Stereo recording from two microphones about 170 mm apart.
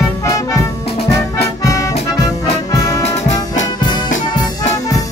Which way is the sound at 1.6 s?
20° left (ahead or behind).